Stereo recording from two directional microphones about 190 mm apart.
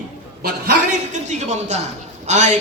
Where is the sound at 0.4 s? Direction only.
45° right (ahead or behind).